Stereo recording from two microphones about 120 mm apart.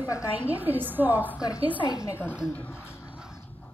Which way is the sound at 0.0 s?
25° left (ahead or behind).